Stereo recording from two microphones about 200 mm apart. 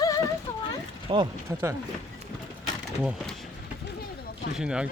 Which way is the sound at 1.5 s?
15° right (ahead or behind).